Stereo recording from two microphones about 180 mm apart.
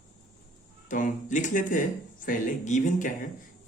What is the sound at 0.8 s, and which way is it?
Speech, 45° left (ahead or behind).